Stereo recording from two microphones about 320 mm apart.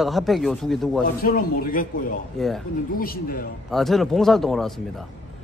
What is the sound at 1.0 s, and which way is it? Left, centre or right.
Speech, left.